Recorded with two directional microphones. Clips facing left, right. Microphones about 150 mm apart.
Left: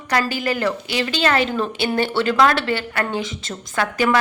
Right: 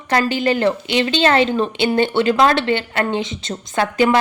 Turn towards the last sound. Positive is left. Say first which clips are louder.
# right 3 dB
turn(degrees=-25)  # may be behind; listen again after turning